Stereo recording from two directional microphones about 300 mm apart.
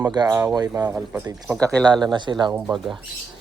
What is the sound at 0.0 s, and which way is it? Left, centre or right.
Speech, centre.